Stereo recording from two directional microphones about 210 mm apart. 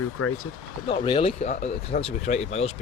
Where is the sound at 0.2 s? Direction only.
90° left.